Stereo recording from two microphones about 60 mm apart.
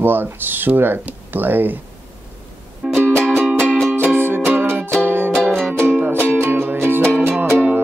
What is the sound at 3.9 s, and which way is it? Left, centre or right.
Music, right.